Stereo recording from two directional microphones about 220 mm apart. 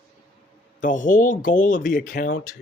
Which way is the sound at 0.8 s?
35° left (ahead or behind).